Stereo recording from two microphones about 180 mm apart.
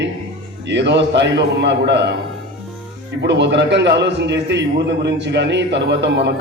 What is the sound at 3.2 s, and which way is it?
A man's voice, 75° right (ahead or behind).